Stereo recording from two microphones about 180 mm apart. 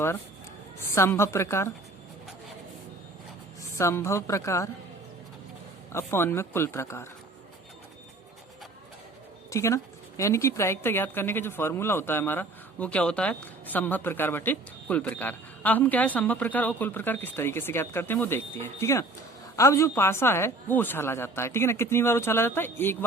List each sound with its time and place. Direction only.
0.8 s speech: 15° left (ahead or behind)
3.6 s speech: 15° left (ahead or behind)
5.9 s speech: 15° left (ahead or behind)
9.5 s speech: 15° left (ahead or behind)